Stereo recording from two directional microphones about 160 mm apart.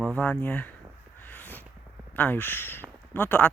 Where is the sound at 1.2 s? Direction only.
10° left (ahead or behind).